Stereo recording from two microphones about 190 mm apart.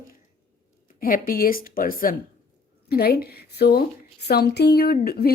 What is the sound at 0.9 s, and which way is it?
Speech, 50° left (ahead or behind).